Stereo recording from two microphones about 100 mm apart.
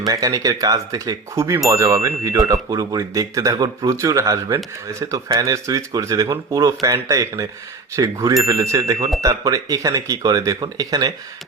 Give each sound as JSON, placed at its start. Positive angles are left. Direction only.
{"t": 0.0, "sound": "speech", "side_deg": -40}
{"t": 3.9, "sound": "speech", "side_deg": -30}